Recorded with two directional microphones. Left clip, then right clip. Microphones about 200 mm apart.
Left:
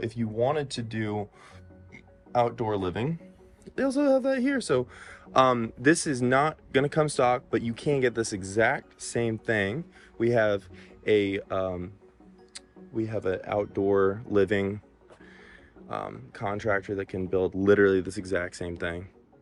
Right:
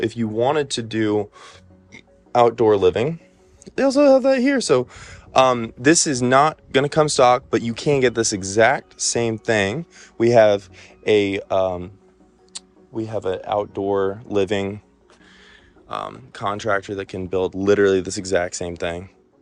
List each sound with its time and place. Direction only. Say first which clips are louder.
0.0 s speech: right 7 dB; 35° right (ahead or behind); by 14.8 s 15° right (ahead or behind)
15.9 s speech: right 6 dB; 5° right (ahead or behind)